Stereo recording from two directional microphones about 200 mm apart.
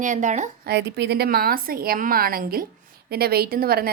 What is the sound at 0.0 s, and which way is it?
Speech, 40° right (ahead or behind).